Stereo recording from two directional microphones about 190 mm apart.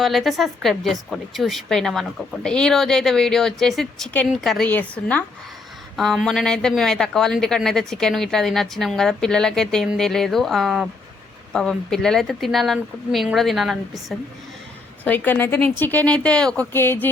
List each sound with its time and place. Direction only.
0.0 s a woman's voice: centre (ahead or behind)
15.0 s speech: 10° left (ahead or behind)